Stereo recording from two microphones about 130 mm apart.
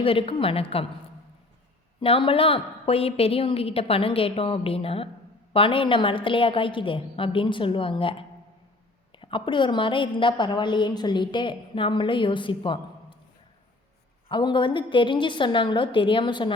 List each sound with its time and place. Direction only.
0.0 s a woman's voice: 45° left (ahead or behind)
2.0 s a woman's voice: 45° left (ahead or behind)
9.1 s a woman's voice: 40° left (ahead or behind)
14.3 s a woman's voice: 40° left (ahead or behind)